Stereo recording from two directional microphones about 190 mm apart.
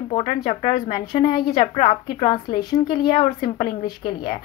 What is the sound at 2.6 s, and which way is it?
Speech, 20° left (ahead or behind).